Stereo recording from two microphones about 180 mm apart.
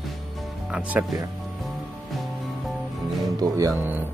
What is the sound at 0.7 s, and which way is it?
Speech, 5° right (ahead or behind).